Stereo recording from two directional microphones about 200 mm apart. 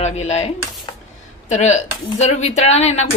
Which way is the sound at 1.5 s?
35° left (ahead or behind).